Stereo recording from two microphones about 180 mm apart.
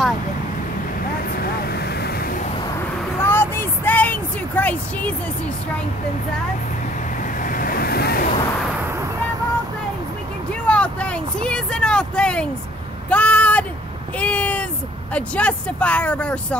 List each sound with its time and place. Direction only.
1.4 s vehicle: 65° left (ahead or behind)
3.2 s a sound: 10° left (ahead or behind)
7.4 s vehicle: 50° left (ahead or behind)
10.5 s vehicle: 5° left (ahead or behind)
13.1 s a sound: 10° left (ahead or behind)
15.1 s speech: 5° left (ahead or behind)